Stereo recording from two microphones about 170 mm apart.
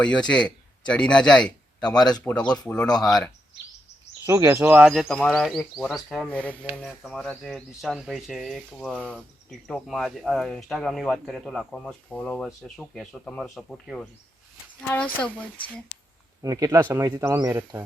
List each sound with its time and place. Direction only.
0.0 s a man's voice: 5° left (ahead or behind)
4.3 s speech: 15° right (ahead or behind)
4.9 s a woman's voice: centre (ahead or behind)
16.4 s speech: 20° right (ahead or behind)